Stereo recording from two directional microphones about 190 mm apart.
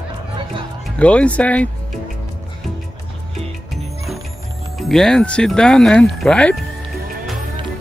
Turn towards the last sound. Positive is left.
turn(degrees=5)  # may be behind; listen again after turning